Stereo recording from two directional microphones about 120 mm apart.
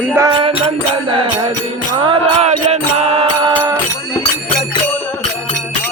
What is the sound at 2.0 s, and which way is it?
Music, 50° right (ahead or behind).